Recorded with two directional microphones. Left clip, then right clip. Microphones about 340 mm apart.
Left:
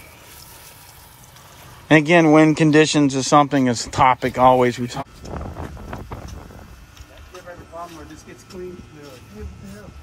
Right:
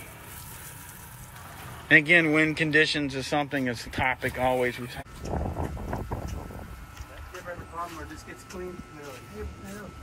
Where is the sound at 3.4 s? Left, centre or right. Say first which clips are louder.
Left 11 dB; left.